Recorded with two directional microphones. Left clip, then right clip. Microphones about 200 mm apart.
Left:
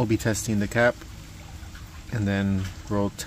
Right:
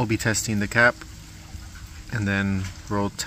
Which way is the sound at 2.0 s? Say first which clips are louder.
Right 2 dB; 5° left (ahead or behind).